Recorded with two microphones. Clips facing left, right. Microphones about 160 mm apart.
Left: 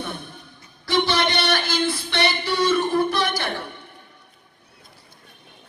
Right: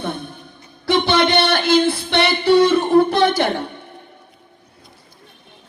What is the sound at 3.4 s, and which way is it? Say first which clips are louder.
Speech: right 8 dB; 25° right (ahead or behind).